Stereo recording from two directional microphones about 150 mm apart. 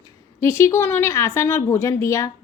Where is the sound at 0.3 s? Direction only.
20° left (ahead or behind).